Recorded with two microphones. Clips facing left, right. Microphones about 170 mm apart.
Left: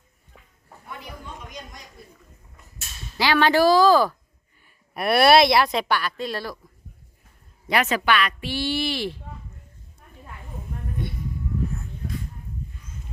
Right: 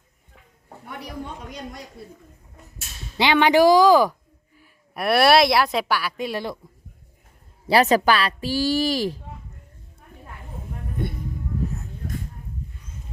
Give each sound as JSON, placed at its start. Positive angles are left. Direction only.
{"t": 3.2, "sound": "speech", "side_deg": -20}
{"t": 4.6, "sound": "a woman's voice", "side_deg": 0}
{"t": 7.7, "sound": "a woman's voice", "side_deg": -35}